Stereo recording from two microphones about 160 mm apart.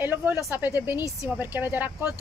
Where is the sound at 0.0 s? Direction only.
10° right (ahead or behind).